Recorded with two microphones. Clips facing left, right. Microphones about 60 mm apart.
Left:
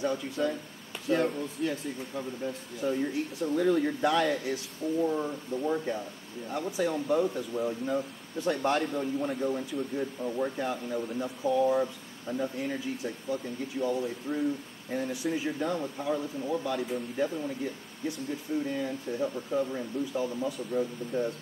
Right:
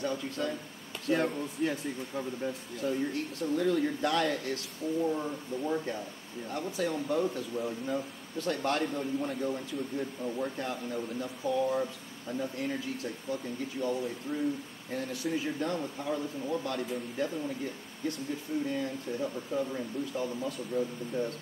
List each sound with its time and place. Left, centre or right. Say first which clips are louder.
0.0 s speech: left 3 dB; centre
1.1 s speech: left 2 dB; centre
2.8 s speech: left 2 dB; centre
18.7 s speech: left 1 dB; centre